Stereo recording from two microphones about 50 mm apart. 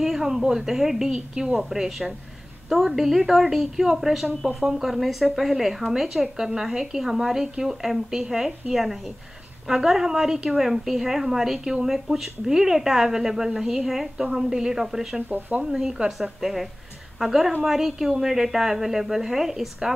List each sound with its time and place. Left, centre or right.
0.0 s a woman's voice: centre
15.2 s speech: right
15.6 s a woman's voice: centre